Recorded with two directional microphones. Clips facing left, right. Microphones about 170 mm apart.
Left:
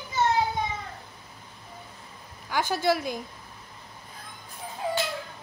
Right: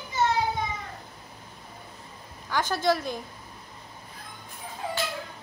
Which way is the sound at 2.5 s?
10° left (ahead or behind).